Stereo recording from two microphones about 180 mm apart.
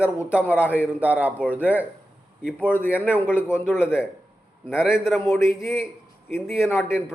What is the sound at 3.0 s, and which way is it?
Speech, 10° left (ahead or behind).